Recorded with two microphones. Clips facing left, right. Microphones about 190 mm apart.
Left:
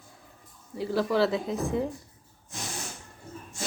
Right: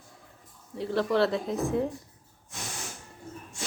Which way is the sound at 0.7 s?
5° left (ahead or behind).